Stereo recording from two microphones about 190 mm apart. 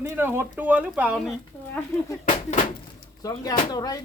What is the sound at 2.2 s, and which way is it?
Speech, 40° left (ahead or behind).